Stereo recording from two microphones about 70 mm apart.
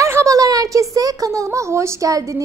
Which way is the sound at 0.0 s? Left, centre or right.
Right.